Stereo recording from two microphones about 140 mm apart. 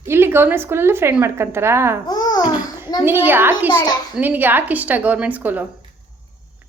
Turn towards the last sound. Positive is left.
turn(degrees=-10)  # may be behind; listen again after turning